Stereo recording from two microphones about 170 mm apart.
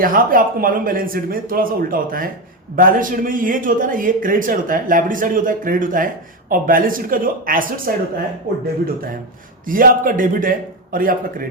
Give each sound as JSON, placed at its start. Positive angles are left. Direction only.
{"t": 0.0, "sound": "a man's voice", "side_deg": -55}
{"t": 9.6, "sound": "a man's voice", "side_deg": -55}